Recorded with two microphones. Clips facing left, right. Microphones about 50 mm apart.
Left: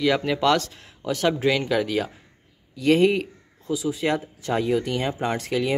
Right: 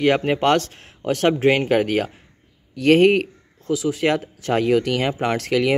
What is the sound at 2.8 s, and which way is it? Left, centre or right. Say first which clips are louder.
Speech: right 4 dB; right.